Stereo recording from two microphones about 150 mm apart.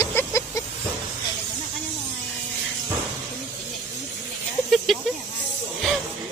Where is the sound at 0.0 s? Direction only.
15° left (ahead or behind).